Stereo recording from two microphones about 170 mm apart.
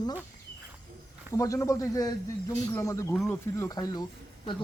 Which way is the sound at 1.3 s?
20° left (ahead or behind).